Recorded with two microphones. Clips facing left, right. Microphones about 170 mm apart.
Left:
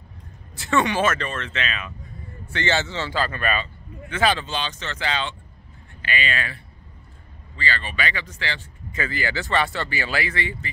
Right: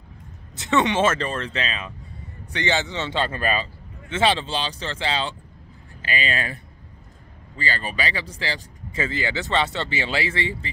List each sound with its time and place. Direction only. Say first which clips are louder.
0.6 s speech: right 1 dB; 20° right (ahead or behind)
2.5 s speech: even; 15° right (ahead or behind)